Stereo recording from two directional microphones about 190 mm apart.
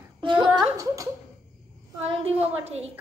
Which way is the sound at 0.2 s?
25° right (ahead or behind).